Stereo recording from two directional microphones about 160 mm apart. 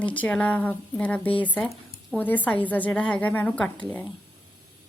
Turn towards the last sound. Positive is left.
turn(degrees=10)  # may be behind; listen again after turning